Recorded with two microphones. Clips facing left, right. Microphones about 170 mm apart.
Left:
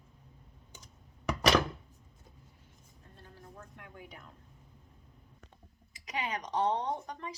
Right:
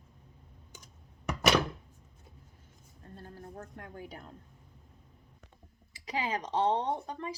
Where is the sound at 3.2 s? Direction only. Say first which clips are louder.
Right 6 dB; 45° right (ahead or behind).